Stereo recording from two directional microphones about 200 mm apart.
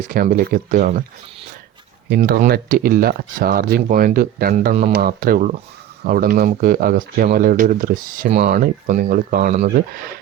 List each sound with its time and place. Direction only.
0.1 s speech: 45° right (ahead or behind)
2.0 s speech: 50° right (ahead or behind)